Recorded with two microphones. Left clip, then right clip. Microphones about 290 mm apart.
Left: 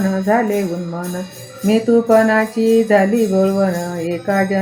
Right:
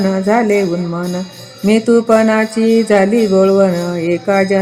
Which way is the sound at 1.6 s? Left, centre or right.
Right.